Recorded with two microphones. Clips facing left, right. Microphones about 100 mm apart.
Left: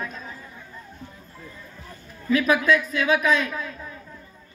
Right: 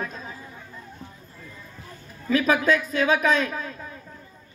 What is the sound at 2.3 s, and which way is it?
A man's voice, 35° right (ahead or behind).